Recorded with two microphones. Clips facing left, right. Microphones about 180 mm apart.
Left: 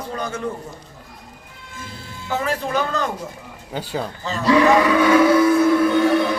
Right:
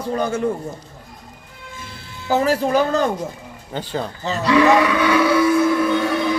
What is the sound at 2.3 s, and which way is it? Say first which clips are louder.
Speech: right 6 dB; 35° right (ahead or behind).